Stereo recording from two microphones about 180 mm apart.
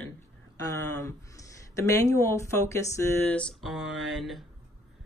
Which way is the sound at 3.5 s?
Centre (ahead or behind).